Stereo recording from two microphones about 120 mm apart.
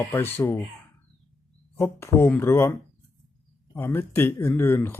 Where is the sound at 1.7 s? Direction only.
20° left (ahead or behind).